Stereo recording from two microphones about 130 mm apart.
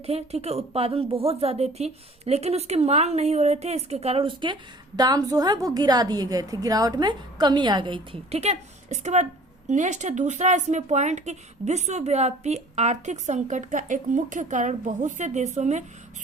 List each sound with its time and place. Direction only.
0.0 s a woman's voice: 55° right (ahead or behind)
4.9 s a woman's voice: 30° right (ahead or behind)
8.3 s speech: 55° right (ahead or behind)